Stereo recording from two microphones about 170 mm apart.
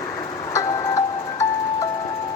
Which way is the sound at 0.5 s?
20° left (ahead or behind).